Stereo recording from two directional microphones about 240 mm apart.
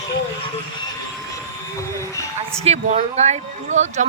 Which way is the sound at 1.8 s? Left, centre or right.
Centre.